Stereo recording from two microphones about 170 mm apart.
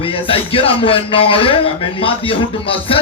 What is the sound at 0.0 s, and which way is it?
Speech, 35° left (ahead or behind).